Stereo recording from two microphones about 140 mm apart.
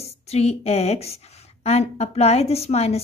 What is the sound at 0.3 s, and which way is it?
A woman's voice, 50° left (ahead or behind).